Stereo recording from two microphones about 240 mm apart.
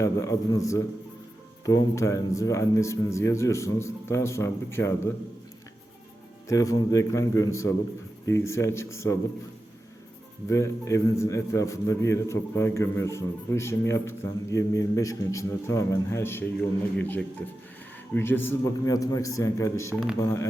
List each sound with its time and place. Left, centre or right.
0.0 s a man's voice: centre
6.5 s a man's voice: centre
10.5 s a man's voice: centre